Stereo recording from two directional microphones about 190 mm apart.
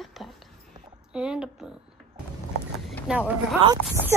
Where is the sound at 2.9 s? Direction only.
Centre (ahead or behind).